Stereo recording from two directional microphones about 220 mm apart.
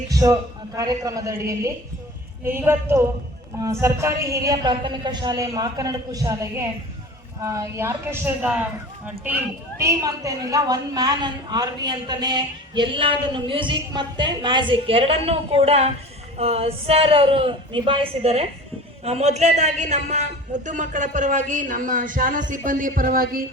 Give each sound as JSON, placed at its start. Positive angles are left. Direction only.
{"t": 0.1, "sound": "a man's voice", "side_deg": -15}